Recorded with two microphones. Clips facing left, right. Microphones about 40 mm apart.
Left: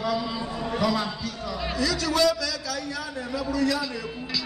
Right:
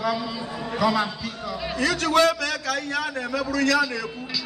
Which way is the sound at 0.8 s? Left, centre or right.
Right.